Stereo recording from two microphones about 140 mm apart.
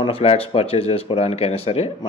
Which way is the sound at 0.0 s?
45° left (ahead or behind).